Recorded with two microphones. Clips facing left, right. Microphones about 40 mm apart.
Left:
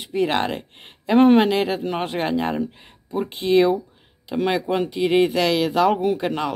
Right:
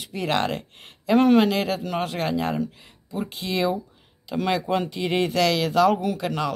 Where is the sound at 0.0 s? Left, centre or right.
Left.